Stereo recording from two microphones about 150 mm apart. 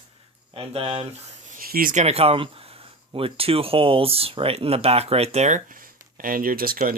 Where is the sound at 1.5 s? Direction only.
75° right (ahead or behind).